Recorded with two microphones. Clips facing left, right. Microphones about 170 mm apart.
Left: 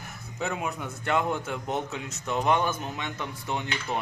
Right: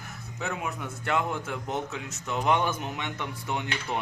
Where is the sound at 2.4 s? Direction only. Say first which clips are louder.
Even; 10° right (ahead or behind).